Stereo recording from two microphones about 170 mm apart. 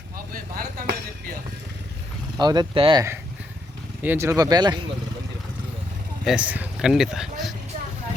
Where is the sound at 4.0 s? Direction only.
10° right (ahead or behind).